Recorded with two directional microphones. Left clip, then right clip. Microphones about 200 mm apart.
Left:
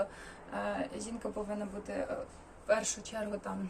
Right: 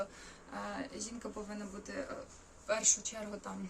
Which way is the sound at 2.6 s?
15° right (ahead or behind).